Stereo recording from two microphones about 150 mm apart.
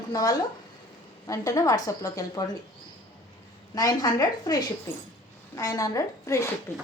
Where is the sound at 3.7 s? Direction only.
25° left (ahead or behind).